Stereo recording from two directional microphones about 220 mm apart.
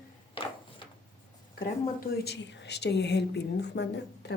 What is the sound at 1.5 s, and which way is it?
Speech, 40° left (ahead or behind).